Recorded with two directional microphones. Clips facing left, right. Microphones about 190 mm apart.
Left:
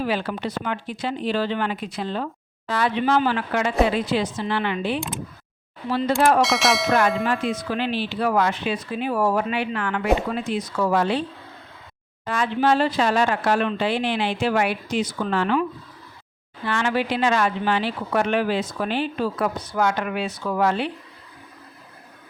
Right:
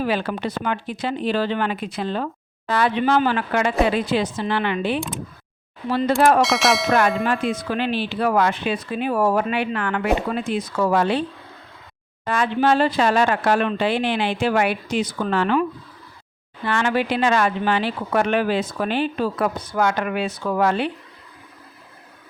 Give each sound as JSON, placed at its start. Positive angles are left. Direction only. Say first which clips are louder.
{"t": 0.0, "sound": "speech", "louder": "right 2 dB", "side_deg": -55}
{"t": 6.4, "sound": "bell", "louder": "right 1 dB", "side_deg": 0}
{"t": 7.4, "sound": "speech", "louder": "right 2 dB", "side_deg": -55}
{"t": 12.2, "sound": "speech", "louder": "right 2 dB", "side_deg": -60}
{"t": 16.6, "sound": "speech", "louder": "right 2 dB", "side_deg": -55}